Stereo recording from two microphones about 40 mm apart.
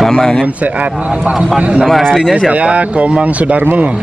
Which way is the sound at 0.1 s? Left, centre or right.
Centre.